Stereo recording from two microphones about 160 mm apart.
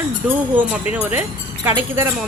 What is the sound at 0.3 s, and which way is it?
Speech, 10° right (ahead or behind).